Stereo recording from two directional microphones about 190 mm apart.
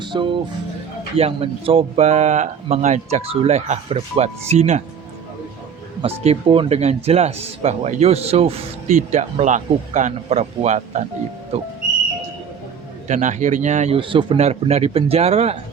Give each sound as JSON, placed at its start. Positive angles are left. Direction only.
{"t": 0.0, "sound": "speech", "side_deg": -25}
{"t": 6.0, "sound": "speech", "side_deg": -30}
{"t": 13.1, "sound": "speech", "side_deg": -40}